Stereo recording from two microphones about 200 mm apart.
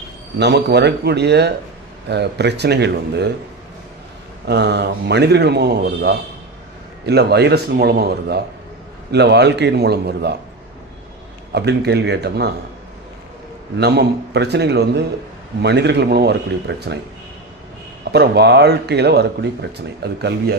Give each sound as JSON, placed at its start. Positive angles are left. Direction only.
{"t": 0.3, "sound": "a man's voice", "side_deg": -55}
{"t": 4.4, "sound": "a man's voice", "side_deg": -60}
{"t": 11.5, "sound": "a man's voice", "side_deg": -55}
{"t": 13.7, "sound": "a man's voice", "side_deg": -55}
{"t": 18.1, "sound": "a man's voice", "side_deg": -55}